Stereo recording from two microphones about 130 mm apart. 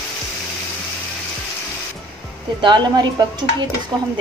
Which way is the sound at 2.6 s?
35° right (ahead or behind).